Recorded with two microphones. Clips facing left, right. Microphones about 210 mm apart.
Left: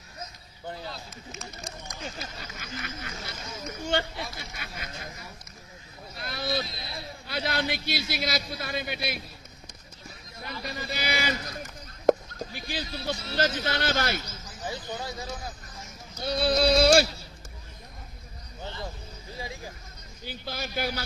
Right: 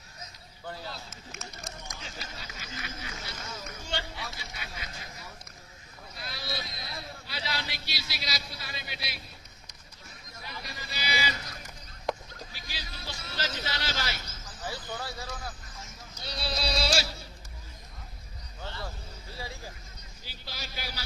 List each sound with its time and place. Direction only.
0.9 s speech: centre (ahead or behind)
2.0 s a man's voice: 50° left (ahead or behind)
6.1 s a man's voice: 50° left (ahead or behind)
10.4 s a man's voice: 55° left (ahead or behind)
12.0 s a sound: 50° left (ahead or behind)
13.3 s a man's voice: 55° left (ahead or behind)
14.6 s speech: 20° left (ahead or behind)
16.2 s a man's voice: 55° left (ahead or behind)
18.6 s a sound: 15° left (ahead or behind)
19.3 s speech: 15° left (ahead or behind)
20.2 s a man's voice: 55° left (ahead or behind)